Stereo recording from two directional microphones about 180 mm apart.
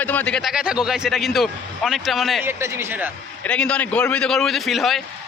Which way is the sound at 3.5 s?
5° left (ahead or behind).